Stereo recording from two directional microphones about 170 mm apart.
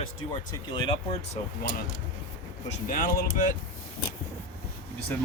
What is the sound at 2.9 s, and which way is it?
Speech, 55° left (ahead or behind).